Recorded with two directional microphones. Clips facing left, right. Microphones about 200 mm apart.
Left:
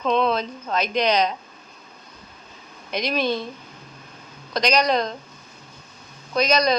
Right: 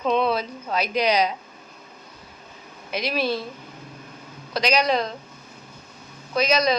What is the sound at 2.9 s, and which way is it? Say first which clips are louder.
Speech: left 1 dB; 5° right (ahead or behind).